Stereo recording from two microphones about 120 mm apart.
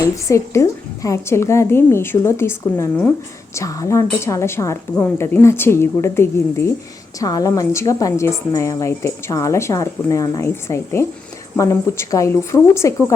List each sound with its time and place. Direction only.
0.3 s a woman's voice: 25° left (ahead or behind)